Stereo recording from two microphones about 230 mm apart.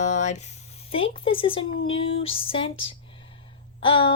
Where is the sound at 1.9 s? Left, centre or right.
Left.